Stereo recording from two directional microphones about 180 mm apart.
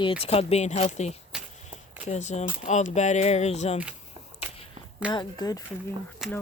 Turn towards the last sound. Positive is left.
turn(degrees=0)  # may be behind; listen again after turning